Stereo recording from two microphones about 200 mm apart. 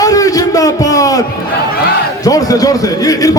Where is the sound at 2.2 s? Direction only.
20° left (ahead or behind).